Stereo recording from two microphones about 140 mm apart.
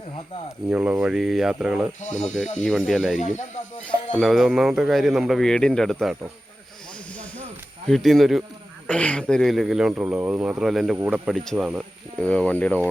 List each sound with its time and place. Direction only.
0.7 s speech: 10° right (ahead or behind)
2.0 s speech: 60° left (ahead or behind)
2.2 s speech: 5° left (ahead or behind)
3.2 s speech: 60° left (ahead or behind)
4.2 s speech: centre (ahead or behind)
7.9 s speech: centre (ahead or behind)
10.9 s speech: 15° right (ahead or behind)
12.2 s speech: 10° left (ahead or behind)